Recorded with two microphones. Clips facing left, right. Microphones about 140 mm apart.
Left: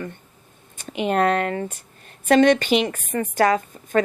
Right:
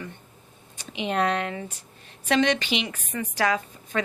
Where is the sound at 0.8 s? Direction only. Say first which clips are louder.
Left 5 dB; 50° left (ahead or behind).